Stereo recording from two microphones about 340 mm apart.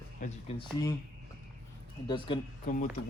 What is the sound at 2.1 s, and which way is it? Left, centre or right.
Speech, centre.